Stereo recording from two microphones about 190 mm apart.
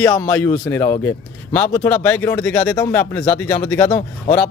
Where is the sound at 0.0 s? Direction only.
15° left (ahead or behind).